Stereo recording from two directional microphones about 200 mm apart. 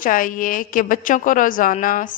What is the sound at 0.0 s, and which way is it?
A woman's voice, 45° left (ahead or behind).